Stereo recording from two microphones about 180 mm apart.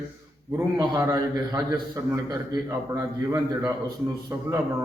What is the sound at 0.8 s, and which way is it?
A man's voice, 20° right (ahead or behind).